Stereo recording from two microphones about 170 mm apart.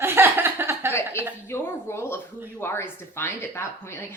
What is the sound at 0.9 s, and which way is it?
A woman's voice, 15° left (ahead or behind).